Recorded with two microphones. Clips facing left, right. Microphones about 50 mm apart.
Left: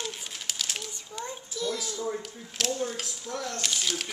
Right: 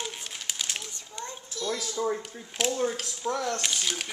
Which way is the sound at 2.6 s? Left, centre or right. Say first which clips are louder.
Right 2 dB; centre.